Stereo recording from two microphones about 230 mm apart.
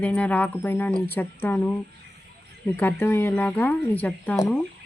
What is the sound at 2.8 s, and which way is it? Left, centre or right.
Speech, centre.